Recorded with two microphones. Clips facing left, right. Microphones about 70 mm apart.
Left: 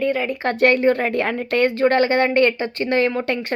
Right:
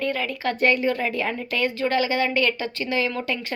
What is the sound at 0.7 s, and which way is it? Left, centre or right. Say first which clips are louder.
Speech: left 6 dB; left.